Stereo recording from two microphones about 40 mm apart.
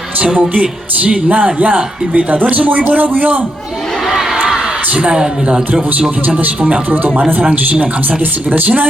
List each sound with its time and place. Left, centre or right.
0.6 s a man's voice: right
4.9 s a man's voice: right
6.4 s a man's voice: right
8.4 s speech: right